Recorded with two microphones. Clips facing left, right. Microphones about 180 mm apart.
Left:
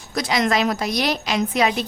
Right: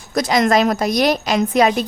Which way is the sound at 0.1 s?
45° right (ahead or behind).